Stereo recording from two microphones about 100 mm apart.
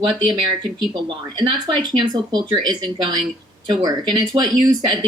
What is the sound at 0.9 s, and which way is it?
Speech, 45° right (ahead or behind).